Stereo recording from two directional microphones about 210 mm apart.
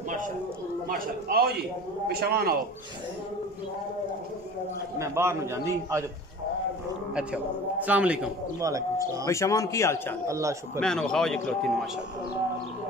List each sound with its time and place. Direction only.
0.8 s speech: 45° right (ahead or behind)
4.9 s speech: 15° right (ahead or behind)
7.8 s speech: 5° right (ahead or behind)
9.2 s a man's voice: 15° left (ahead or behind)
10.2 s speech: 15° right (ahead or behind)
10.8 s a man's voice: 5° left (ahead or behind)